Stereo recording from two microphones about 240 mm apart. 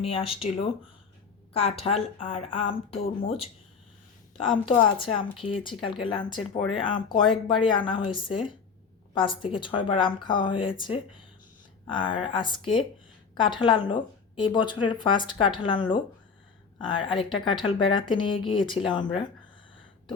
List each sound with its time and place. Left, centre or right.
0.0 s speech: left
4.8 s speech: left